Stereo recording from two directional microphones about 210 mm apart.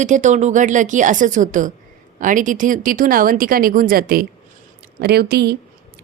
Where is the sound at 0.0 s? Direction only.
35° right (ahead or behind).